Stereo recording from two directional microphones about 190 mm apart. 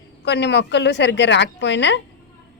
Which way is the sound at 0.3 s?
65° left (ahead or behind).